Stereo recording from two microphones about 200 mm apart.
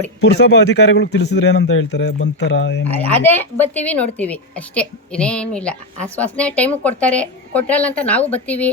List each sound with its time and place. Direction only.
0.2 s a man's voice: 55° left (ahead or behind)
2.8 s a woman's voice: 10° left (ahead or behind)